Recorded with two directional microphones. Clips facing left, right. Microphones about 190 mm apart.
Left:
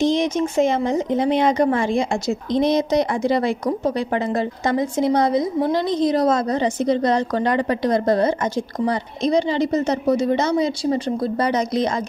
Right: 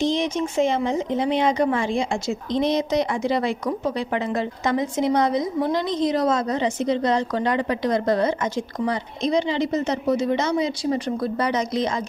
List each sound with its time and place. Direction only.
0.0 s speech: 45° left (ahead or behind)